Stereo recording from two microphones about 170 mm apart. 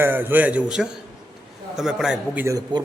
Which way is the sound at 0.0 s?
10° right (ahead or behind).